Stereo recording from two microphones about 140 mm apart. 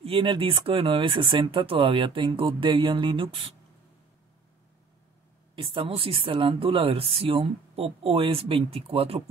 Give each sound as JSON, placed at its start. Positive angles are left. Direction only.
{"t": 0.0, "sound": "speech", "side_deg": -40}
{"t": 5.6, "sound": "speech", "side_deg": -40}